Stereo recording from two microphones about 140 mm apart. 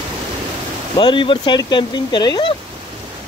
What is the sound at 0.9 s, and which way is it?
Speech, 35° left (ahead or behind).